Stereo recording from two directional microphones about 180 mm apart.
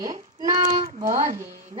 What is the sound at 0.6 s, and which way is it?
Speech, 45° right (ahead or behind).